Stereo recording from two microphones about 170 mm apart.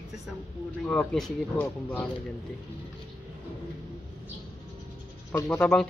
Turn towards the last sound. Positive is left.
turn(degrees=5)  # may be behind; listen again after turning